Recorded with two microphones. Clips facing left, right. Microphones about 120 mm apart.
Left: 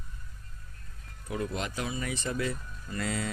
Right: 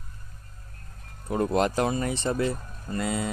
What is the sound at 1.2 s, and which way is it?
Speech, 45° right (ahead or behind).